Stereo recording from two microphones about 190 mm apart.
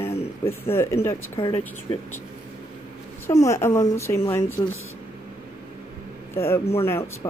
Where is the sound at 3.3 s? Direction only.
15° left (ahead or behind).